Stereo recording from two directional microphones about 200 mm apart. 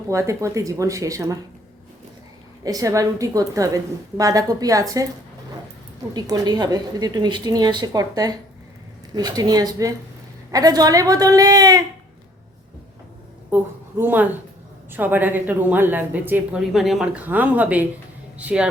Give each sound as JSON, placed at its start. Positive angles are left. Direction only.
{"t": 0.1, "sound": "a woman's voice", "side_deg": -15}
{"t": 2.6, "sound": "a woman's voice", "side_deg": -15}
{"t": 6.1, "sound": "a woman's voice", "side_deg": -20}
{"t": 13.5, "sound": "a woman's voice", "side_deg": -10}